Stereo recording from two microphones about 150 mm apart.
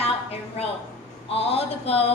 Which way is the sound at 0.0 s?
45° left (ahead or behind).